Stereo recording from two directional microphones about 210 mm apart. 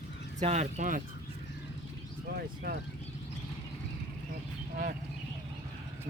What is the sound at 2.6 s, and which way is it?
Speech, 45° right (ahead or behind).